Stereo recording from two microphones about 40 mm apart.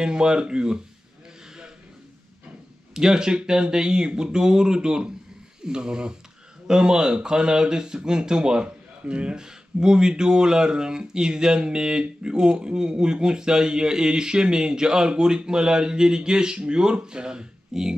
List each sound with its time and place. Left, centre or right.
0.0 s speech: centre
2.9 s speech: centre